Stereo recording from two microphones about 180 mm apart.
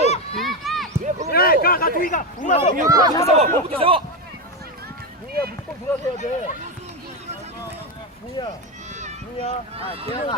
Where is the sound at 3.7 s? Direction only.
30° right (ahead or behind).